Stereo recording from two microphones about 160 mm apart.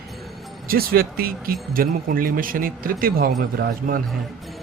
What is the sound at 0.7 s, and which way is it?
A man's voice, 70° right (ahead or behind).